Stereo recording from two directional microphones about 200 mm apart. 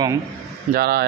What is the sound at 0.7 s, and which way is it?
Speech, 50° right (ahead or behind).